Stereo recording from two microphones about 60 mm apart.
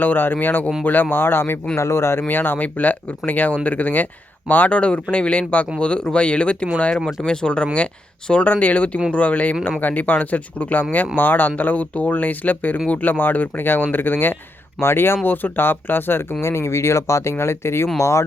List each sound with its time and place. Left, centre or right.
0.0 s speech: left
2.2 s speech: left
6.9 s speech: centre; by 16.2 s left
16.4 s speech: left